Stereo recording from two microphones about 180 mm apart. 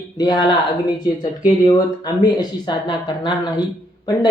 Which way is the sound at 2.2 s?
25° left (ahead or behind).